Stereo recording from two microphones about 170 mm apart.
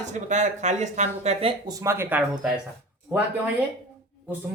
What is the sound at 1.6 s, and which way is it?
Speech, 20° right (ahead or behind).